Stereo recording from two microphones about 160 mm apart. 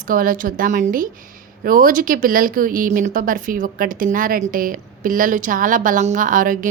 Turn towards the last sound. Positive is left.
turn(degrees=-55)  # may be behind; listen again after turning